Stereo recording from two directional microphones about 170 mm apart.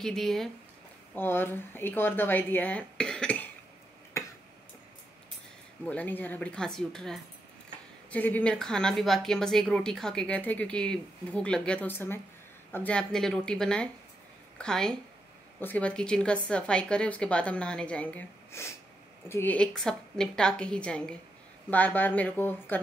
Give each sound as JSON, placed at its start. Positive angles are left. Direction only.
{"t": 0.0, "sound": "a woman's voice", "side_deg": 0}
{"t": 4.2, "sound": "tick-tock", "side_deg": 20}
{"t": 5.9, "sound": "a woman's voice", "side_deg": 10}